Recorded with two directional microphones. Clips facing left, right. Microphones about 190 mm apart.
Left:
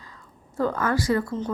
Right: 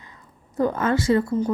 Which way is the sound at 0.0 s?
20° right (ahead or behind).